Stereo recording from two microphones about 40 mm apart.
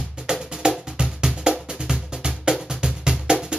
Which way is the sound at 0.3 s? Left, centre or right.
Right.